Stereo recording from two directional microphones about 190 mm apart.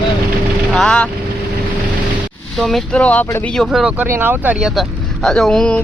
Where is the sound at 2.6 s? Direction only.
Centre (ahead or behind).